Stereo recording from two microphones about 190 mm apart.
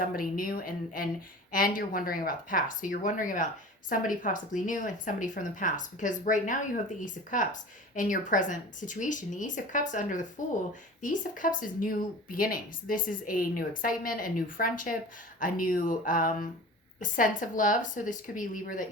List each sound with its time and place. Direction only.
0.0 s speech: 45° left (ahead or behind)